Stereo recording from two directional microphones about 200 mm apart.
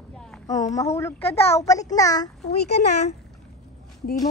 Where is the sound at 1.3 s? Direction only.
30° left (ahead or behind).